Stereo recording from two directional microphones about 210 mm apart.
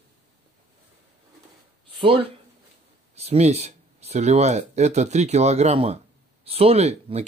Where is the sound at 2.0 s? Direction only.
25° right (ahead or behind).